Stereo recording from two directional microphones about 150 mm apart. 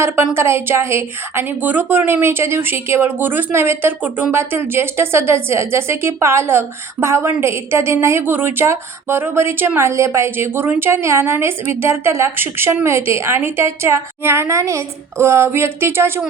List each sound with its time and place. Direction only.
0.3 s speech: 15° right (ahead or behind)